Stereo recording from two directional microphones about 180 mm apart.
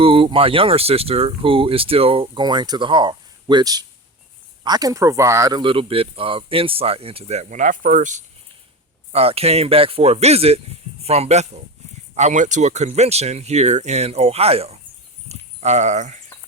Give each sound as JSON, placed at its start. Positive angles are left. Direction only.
{"t": 0.0, "sound": "speech", "side_deg": -30}
{"t": 9.1, "sound": "speech", "side_deg": -35}